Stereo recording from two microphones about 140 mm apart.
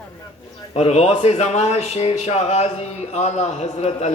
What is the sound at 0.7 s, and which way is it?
Speech, 50° left (ahead or behind).